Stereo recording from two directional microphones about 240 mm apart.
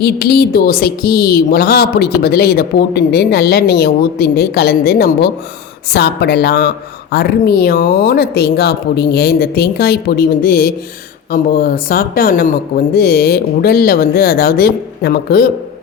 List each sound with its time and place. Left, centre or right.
0.0 s speech: left